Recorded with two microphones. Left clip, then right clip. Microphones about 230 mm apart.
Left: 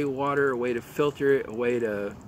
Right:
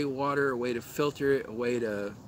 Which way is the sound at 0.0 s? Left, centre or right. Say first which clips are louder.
Left 3 dB; centre.